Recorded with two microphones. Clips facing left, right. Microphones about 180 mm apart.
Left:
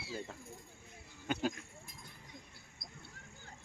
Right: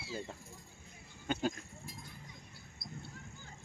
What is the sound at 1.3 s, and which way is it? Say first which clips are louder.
Speech: right 1 dB; 5° left (ahead or behind).